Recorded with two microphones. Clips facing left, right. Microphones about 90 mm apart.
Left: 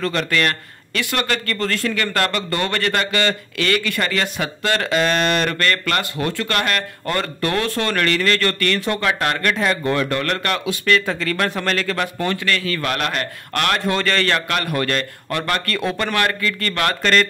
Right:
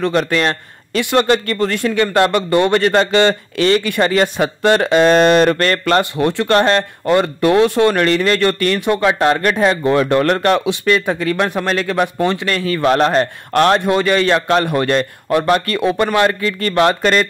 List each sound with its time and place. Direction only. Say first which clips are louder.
0.3 s speech: right 3 dB; 25° right (ahead or behind)
13.8 s a man's voice: right 6 dB; 15° right (ahead or behind)